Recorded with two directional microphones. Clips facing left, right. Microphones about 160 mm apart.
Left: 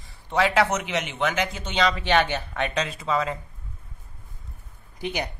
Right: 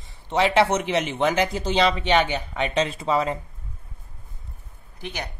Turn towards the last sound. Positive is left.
turn(degrees=15)  # may be behind; listen again after turning